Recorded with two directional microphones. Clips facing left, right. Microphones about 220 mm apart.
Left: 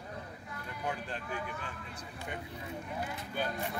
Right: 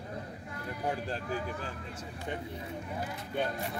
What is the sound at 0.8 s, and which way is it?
Speech, 35° right (ahead or behind).